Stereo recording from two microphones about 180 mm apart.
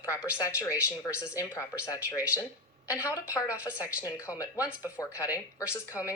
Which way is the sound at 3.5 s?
5° right (ahead or behind).